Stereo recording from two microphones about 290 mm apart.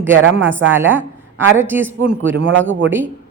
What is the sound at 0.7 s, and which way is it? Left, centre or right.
A man's voice, centre.